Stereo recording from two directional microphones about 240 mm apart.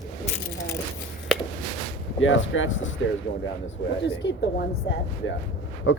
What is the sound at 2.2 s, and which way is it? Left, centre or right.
Speech, left.